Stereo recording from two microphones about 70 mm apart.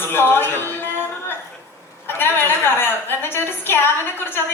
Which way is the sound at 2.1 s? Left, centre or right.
Left.